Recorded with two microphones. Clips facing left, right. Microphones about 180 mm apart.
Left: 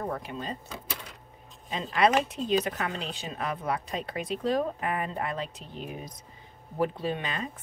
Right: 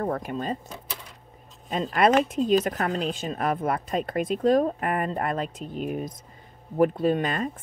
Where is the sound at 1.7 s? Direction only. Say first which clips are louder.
Right 4 dB; 50° right (ahead or behind).